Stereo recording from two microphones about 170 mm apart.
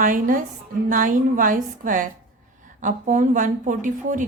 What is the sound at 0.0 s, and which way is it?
A woman's voice, 55° right (ahead or behind).